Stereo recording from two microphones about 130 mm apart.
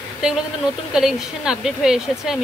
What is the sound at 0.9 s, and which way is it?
Speech, 5° right (ahead or behind).